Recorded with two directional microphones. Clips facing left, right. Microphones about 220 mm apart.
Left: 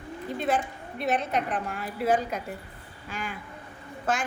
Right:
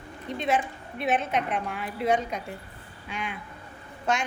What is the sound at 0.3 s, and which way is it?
A woman's voice, centre (ahead or behind).